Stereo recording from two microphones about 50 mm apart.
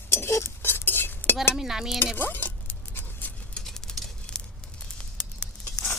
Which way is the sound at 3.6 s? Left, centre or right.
Centre.